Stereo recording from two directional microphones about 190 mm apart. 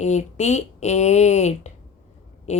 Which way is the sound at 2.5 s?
35° left (ahead or behind).